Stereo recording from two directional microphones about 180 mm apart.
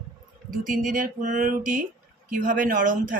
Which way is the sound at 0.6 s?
50° right (ahead or behind).